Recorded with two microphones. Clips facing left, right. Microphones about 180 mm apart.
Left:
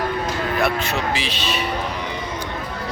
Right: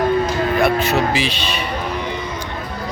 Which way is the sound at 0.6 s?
Centre (ahead or behind).